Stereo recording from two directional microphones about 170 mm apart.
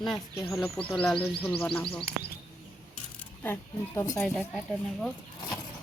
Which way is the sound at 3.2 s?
10° left (ahead or behind).